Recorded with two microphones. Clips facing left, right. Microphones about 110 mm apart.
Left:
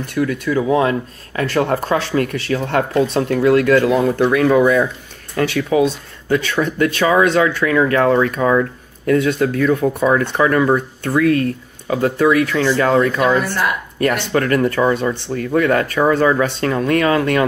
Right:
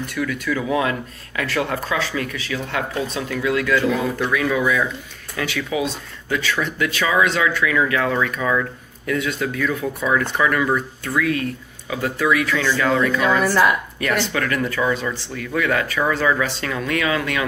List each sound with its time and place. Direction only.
0.2 s speech: 35° left (ahead or behind)
2.0 s speech: 60° left (ahead or behind); by 17.5 s 40° left (ahead or behind)